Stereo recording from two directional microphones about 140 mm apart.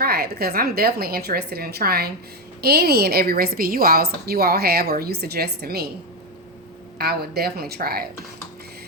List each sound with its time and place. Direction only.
0.0 s a woman's voice: 90° right
7.0 s a woman's voice: 90° right